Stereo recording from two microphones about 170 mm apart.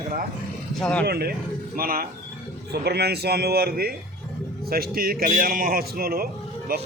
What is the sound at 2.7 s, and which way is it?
A man's voice, 70° right (ahead or behind).